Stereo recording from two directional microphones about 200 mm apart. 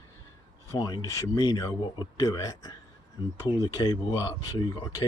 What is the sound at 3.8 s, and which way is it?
Speech, 20° left (ahead or behind).